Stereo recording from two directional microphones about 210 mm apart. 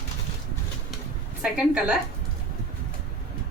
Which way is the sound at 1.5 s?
5° right (ahead or behind).